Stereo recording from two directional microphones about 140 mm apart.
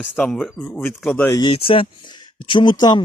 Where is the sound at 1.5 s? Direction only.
40° left (ahead or behind).